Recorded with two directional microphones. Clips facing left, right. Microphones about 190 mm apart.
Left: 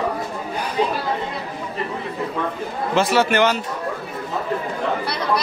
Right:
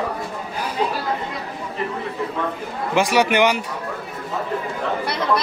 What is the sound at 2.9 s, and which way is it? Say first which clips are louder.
Speech: even; 15° right (ahead or behind).